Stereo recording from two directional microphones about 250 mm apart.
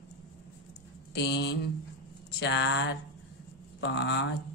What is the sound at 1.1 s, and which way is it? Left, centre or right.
Speech, left.